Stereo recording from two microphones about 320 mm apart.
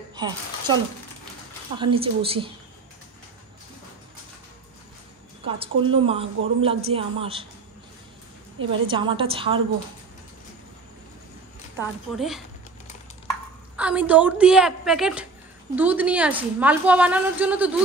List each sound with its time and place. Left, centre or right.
0.1 s speech: centre
1.8 s a woman's voice: centre
5.4 s a woman's voice: centre
8.5 s a woman's voice: centre
11.7 s a woman's voice: centre
13.7 s a woman's voice: centre